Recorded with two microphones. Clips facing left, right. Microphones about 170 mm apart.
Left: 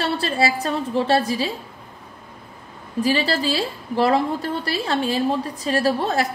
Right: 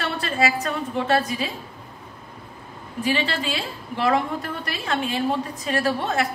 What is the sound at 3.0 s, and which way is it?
A woman's voice, 35° left (ahead or behind).